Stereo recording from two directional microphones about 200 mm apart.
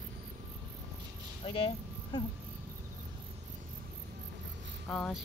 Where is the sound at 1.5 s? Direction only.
25° left (ahead or behind).